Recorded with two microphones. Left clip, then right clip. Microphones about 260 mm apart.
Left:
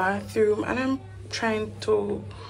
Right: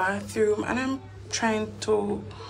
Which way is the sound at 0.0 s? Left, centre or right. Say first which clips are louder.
Left 2 dB; centre.